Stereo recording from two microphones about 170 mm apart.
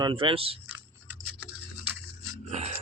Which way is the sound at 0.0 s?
30° right (ahead or behind).